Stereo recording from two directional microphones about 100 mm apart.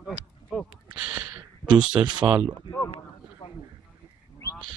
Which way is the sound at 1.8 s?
10° right (ahead or behind).